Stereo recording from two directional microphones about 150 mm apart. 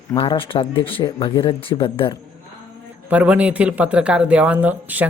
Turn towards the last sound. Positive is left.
turn(degrees=-10)  # may be behind; listen again after turning